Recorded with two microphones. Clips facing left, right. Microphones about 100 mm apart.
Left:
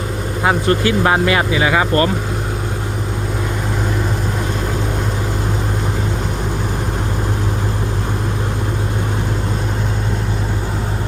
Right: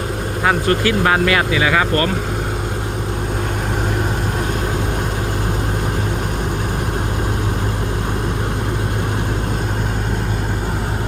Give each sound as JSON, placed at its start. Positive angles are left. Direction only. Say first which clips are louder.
{"t": 0.4, "sound": "speech", "louder": "left 1 dB", "side_deg": 25}